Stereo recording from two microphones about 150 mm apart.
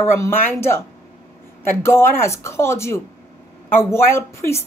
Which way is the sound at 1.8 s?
15° left (ahead or behind).